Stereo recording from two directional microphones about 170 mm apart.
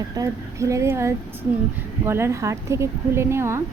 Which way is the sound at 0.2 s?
20° right (ahead or behind).